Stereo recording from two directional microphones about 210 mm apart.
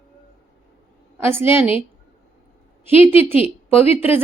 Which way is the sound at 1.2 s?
10° right (ahead or behind).